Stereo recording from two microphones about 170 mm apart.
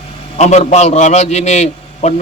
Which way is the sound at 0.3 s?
40° left (ahead or behind).